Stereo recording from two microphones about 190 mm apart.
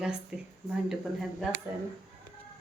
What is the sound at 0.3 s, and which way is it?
Speech, 5° right (ahead or behind).